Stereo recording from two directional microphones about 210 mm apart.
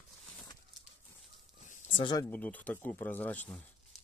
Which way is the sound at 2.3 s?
10° left (ahead or behind).